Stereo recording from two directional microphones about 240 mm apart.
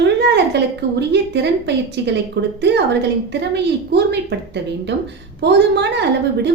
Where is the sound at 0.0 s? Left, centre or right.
Right.